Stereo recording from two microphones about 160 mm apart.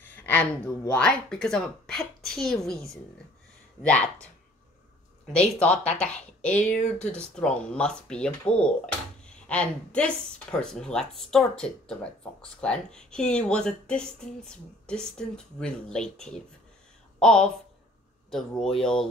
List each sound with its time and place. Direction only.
0.0 s a sound: 10° left (ahead or behind)
0.9 s speech: 5° left (ahead or behind)
5.2 s speech: 5° left (ahead or behind)
6.5 s speech: 50° left (ahead or behind)
7.0 s speech: 5° left (ahead or behind)